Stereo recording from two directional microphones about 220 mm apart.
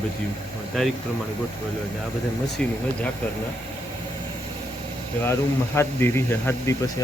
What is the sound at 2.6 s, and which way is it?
Speech, 5° left (ahead or behind).